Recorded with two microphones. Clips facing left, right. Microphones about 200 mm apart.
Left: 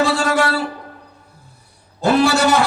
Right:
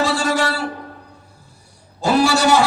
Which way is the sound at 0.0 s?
60° left (ahead or behind).